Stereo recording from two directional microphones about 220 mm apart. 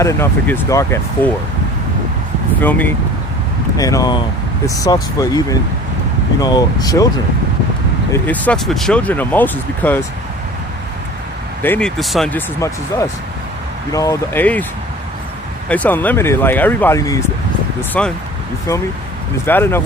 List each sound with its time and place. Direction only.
0.0 s speech: 10° left (ahead or behind)
2.6 s speech: 10° left (ahead or behind)
6.4 s speech: 15° left (ahead or behind)
8.1 s speech: 5° left (ahead or behind)
11.6 s speech: 5° left (ahead or behind)
12.5 s speech: 15° left (ahead or behind)
15.7 s speech: 10° left (ahead or behind)
19.5 s speech: 10° left (ahead or behind)